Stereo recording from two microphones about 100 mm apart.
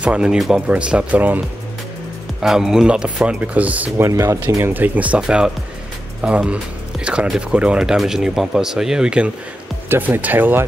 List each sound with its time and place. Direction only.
0.0 s speech: 10° right (ahead or behind)
2.4 s speech: 5° right (ahead or behind)
4.0 s speech: 30° right (ahead or behind)
4.7 s speech: 15° right (ahead or behind)
9.8 s speech: 20° right (ahead or behind)